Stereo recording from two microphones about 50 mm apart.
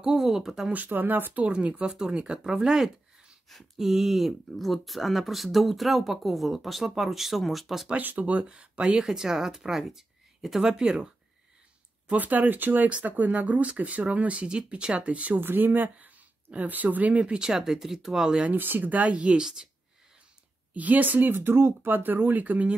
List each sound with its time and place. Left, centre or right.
0.0 s speech: centre
0.8 s speech: right
1.4 s speech: right; by 7.9 s centre
8.0 s speech: right
8.8 s speech: centre
12.1 s speech: right
15.4 s speech: right
17.4 s speech: centre
18.6 s speech: right
19.4 s speech: centre
20.7 s speech: right